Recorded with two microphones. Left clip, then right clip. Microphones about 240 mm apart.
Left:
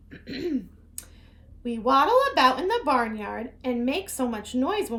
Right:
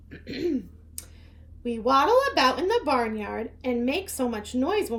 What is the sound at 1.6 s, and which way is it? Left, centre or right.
A woman's voice, centre.